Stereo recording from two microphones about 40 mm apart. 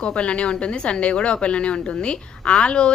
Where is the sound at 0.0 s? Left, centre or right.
Left.